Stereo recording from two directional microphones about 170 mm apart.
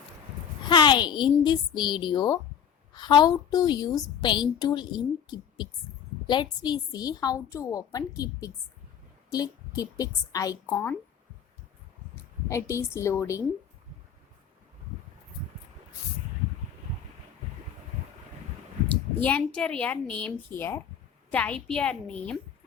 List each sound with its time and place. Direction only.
0.7 s a woman's voice: 25° left (ahead or behind)
12.1 s speech: 15° left (ahead or behind)
19.2 s speech: 10° left (ahead or behind)